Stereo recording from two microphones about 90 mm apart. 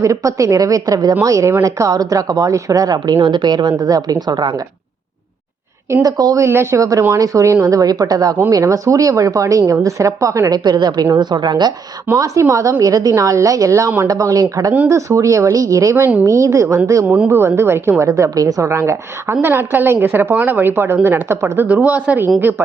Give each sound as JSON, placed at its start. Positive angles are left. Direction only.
{"t": 0.0, "sound": "a woman's voice", "side_deg": -40}
{"t": 3.2, "sound": "a woman's voice", "side_deg": -60}
{"t": 5.9, "sound": "a woman's voice", "side_deg": -45}
{"t": 6.4, "sound": "a woman's voice", "side_deg": -30}
{"t": 10.6, "sound": "a woman's voice", "side_deg": -50}
{"t": 12.1, "sound": "a woman's voice", "side_deg": -35}
{"t": 17.1, "sound": "speech", "side_deg": -15}
{"t": 17.3, "sound": "a woman's voice", "side_deg": -25}
{"t": 18.0, "sound": "a woman's voice", "side_deg": -35}